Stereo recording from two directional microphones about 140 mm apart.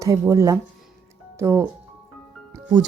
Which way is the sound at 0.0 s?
25° right (ahead or behind).